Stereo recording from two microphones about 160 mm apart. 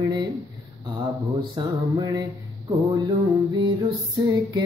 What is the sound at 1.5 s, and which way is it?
Female singing, 25° right (ahead or behind).